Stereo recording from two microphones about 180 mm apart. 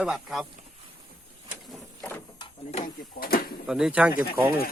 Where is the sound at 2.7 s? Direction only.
55° left (ahead or behind).